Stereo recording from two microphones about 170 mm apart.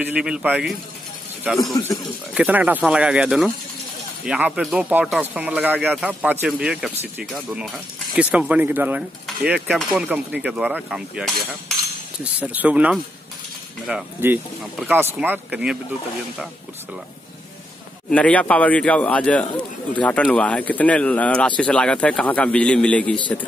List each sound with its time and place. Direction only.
0.0 s speech: 5° right (ahead or behind)
1.8 s speech: 20° left (ahead or behind)
2.3 s speech: 5° right (ahead or behind)
18.1 s speech: 10° left (ahead or behind)